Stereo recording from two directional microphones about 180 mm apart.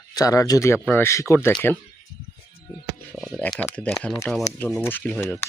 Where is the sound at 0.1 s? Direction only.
20° left (ahead or behind).